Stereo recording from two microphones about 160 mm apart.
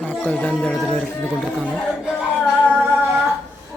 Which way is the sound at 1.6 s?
Centre (ahead or behind).